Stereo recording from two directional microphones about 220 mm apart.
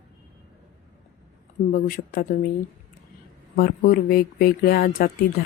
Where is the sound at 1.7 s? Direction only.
40° left (ahead or behind).